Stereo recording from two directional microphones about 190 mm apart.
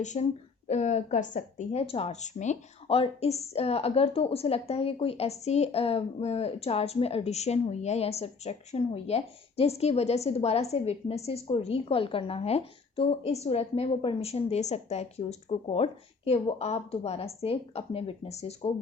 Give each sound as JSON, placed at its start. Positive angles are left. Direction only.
{"t": 0.0, "sound": "speech", "side_deg": 40}